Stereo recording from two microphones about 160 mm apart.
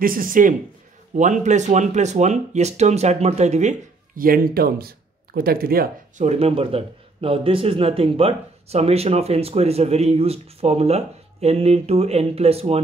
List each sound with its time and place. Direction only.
0.0 s speech: 60° right (ahead or behind); by 3.7 s 45° right (ahead or behind)
4.2 s speech: 70° right (ahead or behind)
6.2 s a man's voice: 40° right (ahead or behind)